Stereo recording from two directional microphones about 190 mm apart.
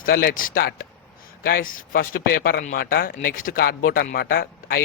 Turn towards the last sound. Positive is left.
turn(degrees=50)  # may be behind; listen again after turning